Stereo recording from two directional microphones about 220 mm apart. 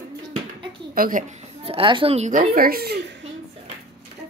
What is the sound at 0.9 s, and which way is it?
A woman's voice, 40° right (ahead or behind).